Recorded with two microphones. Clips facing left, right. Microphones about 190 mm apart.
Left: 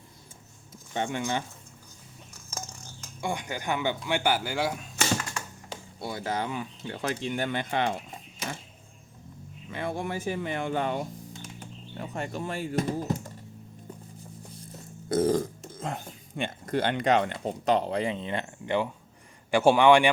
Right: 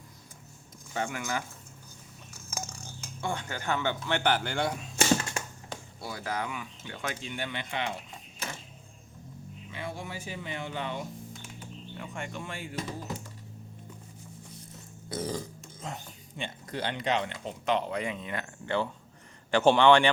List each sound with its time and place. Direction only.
0.9 s speech: 25° left (ahead or behind)
3.2 s speech: 15° left (ahead or behind)
6.0 s speech: 25° left (ahead or behind); by 7.9 s 45° left (ahead or behind)
9.7 s speech: 55° left (ahead or behind)
15.1 s speech: 50° left (ahead or behind)
17.4 s speech: 35° left (ahead or behind); by 20.1 s 10° left (ahead or behind)